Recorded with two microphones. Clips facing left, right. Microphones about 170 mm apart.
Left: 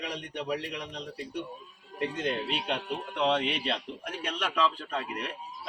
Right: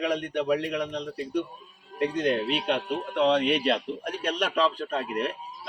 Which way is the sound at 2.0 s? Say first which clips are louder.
Right 6 dB; 60° right (ahead or behind).